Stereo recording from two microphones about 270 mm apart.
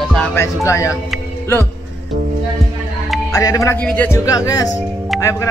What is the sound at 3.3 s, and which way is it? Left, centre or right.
Speech, centre.